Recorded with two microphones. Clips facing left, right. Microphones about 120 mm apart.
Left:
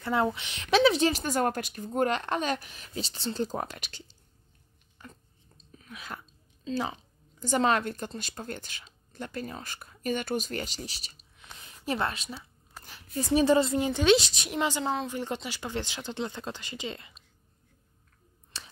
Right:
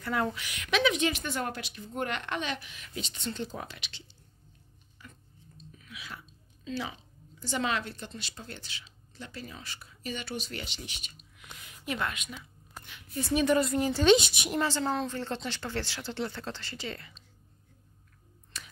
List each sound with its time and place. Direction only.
0.0 s speech: 25° left (ahead or behind); by 4.0 s 45° left (ahead or behind)
5.0 s a sound: 45° left (ahead or behind)
6.6 s a woman's voice: 40° left (ahead or behind); by 14.0 s 25° left (ahead or behind)
14.3 s a woman's voice: centre (ahead or behind)
14.6 s speech: 15° left (ahead or behind)
18.5 s a sound: 30° left (ahead or behind)